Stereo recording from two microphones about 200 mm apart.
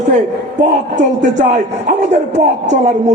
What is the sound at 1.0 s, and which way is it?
A man's voice, 40° right (ahead or behind).